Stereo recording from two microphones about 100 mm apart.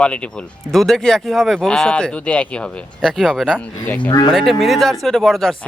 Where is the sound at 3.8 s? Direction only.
15° left (ahead or behind).